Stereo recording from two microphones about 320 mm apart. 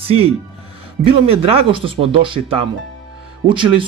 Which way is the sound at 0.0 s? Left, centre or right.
Centre.